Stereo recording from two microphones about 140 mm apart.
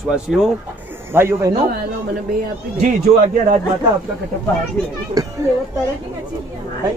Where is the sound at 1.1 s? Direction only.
15° right (ahead or behind).